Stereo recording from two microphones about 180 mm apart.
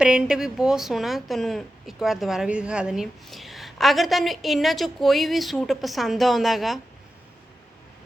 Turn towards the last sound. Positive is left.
turn(degrees=0)  # may be behind; listen again after turning